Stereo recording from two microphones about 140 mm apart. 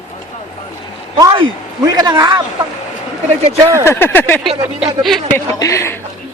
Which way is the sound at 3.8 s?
15° left (ahead or behind).